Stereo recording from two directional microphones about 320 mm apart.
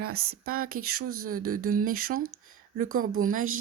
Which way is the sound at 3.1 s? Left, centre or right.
Right.